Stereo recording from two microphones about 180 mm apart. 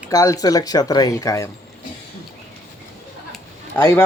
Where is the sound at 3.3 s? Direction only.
10° left (ahead or behind).